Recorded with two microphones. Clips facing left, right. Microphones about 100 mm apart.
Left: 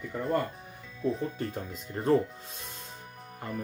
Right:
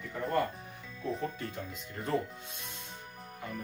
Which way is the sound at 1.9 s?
35° left (ahead or behind).